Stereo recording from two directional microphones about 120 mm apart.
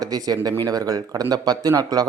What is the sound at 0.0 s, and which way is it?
A man's voice, 35° right (ahead or behind).